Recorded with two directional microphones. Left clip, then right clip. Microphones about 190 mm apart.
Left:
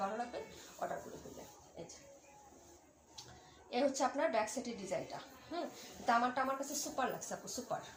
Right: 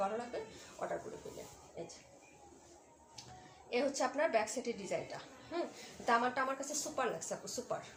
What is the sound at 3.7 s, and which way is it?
A woman's voice, 30° right (ahead or behind).